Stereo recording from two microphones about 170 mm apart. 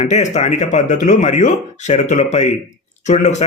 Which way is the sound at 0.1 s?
45° left (ahead or behind).